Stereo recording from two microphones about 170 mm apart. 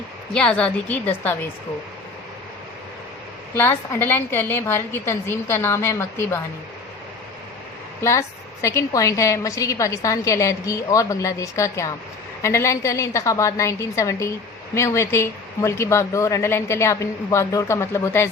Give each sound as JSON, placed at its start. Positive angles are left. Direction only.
{"t": 0.3, "sound": "a woman's voice", "side_deg": 5}
{"t": 3.5, "sound": "a woman's voice", "side_deg": 15}
{"t": 8.0, "sound": "a woman's voice", "side_deg": 15}